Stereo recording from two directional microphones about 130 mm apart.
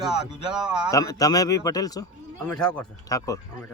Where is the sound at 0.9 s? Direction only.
25° left (ahead or behind).